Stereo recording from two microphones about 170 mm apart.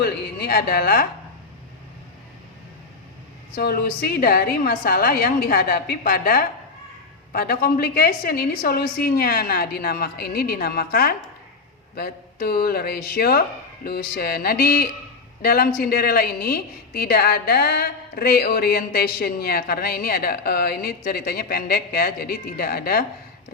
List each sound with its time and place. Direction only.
0.0 s a woman's voice: 65° left (ahead or behind)
3.5 s a woman's voice: 65° left (ahead or behind)